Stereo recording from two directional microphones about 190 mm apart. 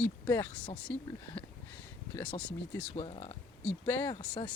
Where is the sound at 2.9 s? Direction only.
30° left (ahead or behind).